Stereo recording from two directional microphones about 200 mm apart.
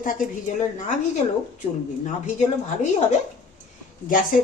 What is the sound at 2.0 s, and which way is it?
A woman's voice, 35° left (ahead or behind).